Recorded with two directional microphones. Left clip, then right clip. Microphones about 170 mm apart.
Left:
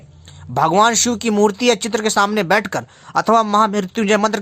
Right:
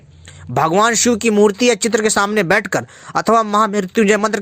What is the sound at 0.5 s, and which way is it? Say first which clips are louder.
Speech: even; 20° right (ahead or behind).